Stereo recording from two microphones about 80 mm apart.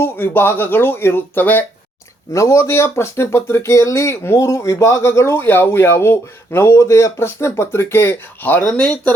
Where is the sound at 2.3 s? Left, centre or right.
Left.